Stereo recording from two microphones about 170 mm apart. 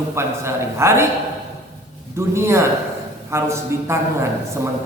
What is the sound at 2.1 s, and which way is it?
A man's voice, 15° right (ahead or behind).